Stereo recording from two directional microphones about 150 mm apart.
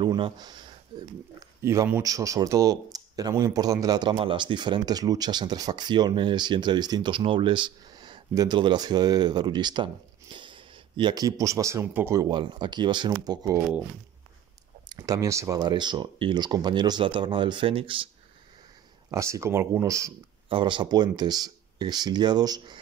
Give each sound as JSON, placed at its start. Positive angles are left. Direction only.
{"t": 0.0, "sound": "speech", "side_deg": -30}
{"t": 1.6, "sound": "speech", "side_deg": -20}
{"t": 14.9, "sound": "speech", "side_deg": -25}
{"t": 19.0, "sound": "speech", "side_deg": -20}
{"t": 20.4, "sound": "speech", "side_deg": -35}